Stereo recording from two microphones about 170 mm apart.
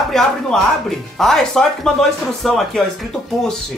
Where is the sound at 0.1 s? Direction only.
5° left (ahead or behind).